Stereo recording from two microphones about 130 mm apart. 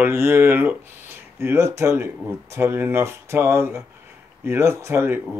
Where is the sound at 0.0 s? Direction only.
20° right (ahead or behind).